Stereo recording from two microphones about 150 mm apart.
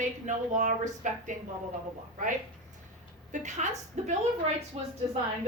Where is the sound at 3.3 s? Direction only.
55° right (ahead or behind).